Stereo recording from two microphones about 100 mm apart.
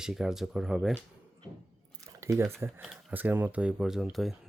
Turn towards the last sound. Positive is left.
turn(degrees=0)  # may be behind; listen again after turning